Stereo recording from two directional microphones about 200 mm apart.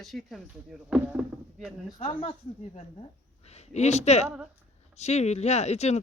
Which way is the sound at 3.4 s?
30° left (ahead or behind).